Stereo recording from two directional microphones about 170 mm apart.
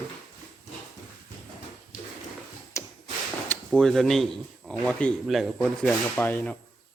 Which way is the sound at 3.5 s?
5° left (ahead or behind).